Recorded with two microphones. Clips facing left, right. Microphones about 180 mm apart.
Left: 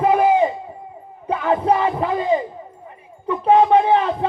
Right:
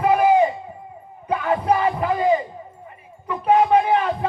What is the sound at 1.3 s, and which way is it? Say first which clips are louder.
Music: left 2 dB; 25° left (ahead or behind).